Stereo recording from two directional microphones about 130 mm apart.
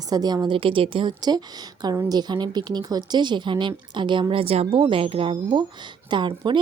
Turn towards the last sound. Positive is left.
turn(degrees=-40)  # may be behind; listen again after turning